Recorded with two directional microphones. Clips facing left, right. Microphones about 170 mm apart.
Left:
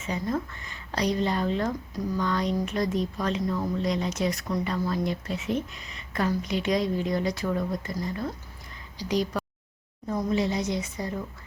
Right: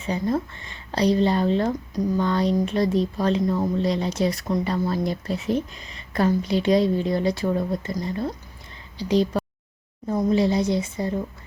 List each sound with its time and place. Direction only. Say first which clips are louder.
0.0 s a woman's voice: right 5 dB; 30° right (ahead or behind)